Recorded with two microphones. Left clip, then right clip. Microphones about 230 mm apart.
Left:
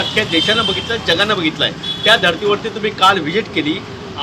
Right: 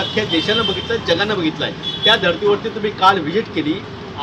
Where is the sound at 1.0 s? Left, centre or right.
Centre.